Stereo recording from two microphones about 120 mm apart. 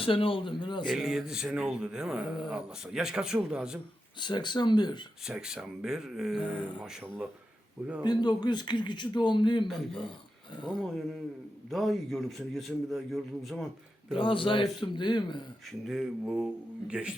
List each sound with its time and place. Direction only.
0.0 s a man's voice: 50° left (ahead or behind)
0.9 s speech: 5° right (ahead or behind)
4.2 s speech: 40° left (ahead or behind)
5.2 s speech: 5° right (ahead or behind)
8.0 s speech: 35° left (ahead or behind)
9.6 s speech: centre (ahead or behind)
14.2 s speech: 45° left (ahead or behind)
15.6 s speech: 5° right (ahead or behind)